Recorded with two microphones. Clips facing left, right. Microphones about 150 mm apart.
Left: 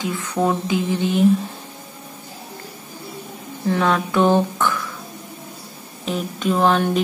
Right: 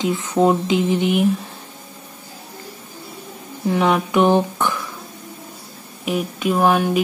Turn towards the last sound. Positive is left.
turn(degrees=-10)  # may be behind; listen again after turning